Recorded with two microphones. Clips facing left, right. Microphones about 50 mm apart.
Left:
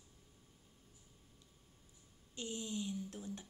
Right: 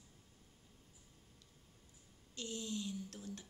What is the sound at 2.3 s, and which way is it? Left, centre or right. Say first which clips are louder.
Speech: left 1 dB; left.